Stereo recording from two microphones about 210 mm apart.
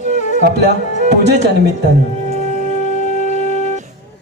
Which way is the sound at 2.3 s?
35° left (ahead or behind).